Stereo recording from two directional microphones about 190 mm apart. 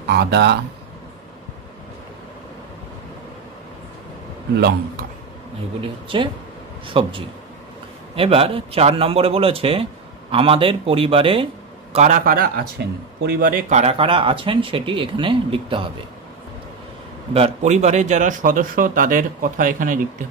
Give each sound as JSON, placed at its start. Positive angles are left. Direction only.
{"t": 0.0, "sound": "speech", "side_deg": -60}
{"t": 4.6, "sound": "speech", "side_deg": -55}
{"t": 5.8, "sound": "a man's voice", "side_deg": -25}
{"t": 11.9, "sound": "speech", "side_deg": -40}
{"t": 17.3, "sound": "a man's voice", "side_deg": -35}